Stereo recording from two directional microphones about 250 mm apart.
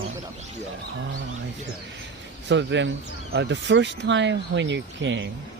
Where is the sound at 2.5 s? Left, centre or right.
Right.